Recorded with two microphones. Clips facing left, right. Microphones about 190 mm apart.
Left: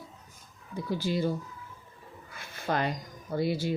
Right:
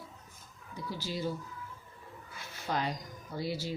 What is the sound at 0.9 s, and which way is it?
Speech, 55° left (ahead or behind).